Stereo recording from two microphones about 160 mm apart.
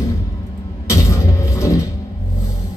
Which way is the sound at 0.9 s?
20° left (ahead or behind).